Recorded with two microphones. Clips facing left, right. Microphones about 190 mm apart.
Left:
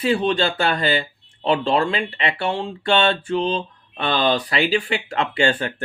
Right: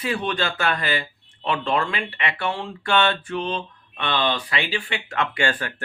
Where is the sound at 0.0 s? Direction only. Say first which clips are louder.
Left 6 dB; 30° left (ahead or behind).